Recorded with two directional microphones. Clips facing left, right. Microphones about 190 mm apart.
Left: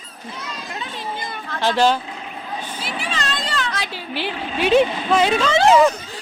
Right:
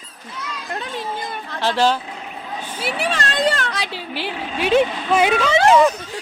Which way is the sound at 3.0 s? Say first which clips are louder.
Right 8 dB; 60° right (ahead or behind).